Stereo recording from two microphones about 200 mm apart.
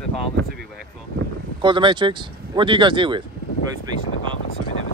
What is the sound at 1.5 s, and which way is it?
Speech, 25° right (ahead or behind).